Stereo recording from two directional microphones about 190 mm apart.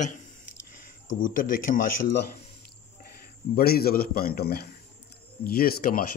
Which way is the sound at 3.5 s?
55° left (ahead or behind).